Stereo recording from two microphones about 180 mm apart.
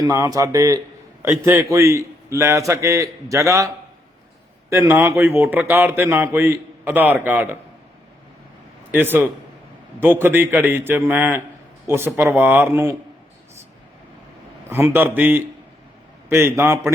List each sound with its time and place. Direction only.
0.0 s a man's voice: 20° right (ahead or behind)
4.7 s a man's voice: 15° right (ahead or behind)
8.9 s a man's voice: 10° right (ahead or behind)
14.7 s a man's voice: 15° right (ahead or behind)